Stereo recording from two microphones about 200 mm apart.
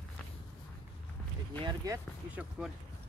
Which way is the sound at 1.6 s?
20° right (ahead or behind).